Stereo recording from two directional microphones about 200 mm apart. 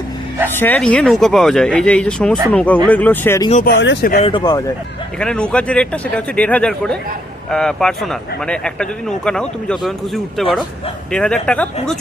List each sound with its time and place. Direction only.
0.5 s a man's voice: 10° left (ahead or behind)
3.5 s speech: 45° left (ahead or behind)
3.8 s speech: 55° left (ahead or behind)
4.2 s speech: 25° left (ahead or behind)
5.2 s a man's voice: 5° left (ahead or behind)
11.1 s a man's voice: 5° left (ahead or behind)